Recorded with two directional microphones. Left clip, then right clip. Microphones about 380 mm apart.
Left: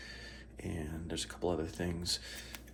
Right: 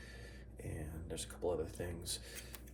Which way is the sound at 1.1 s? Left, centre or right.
Left.